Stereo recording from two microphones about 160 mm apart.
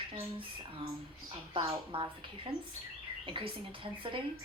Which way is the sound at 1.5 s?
35° right (ahead or behind).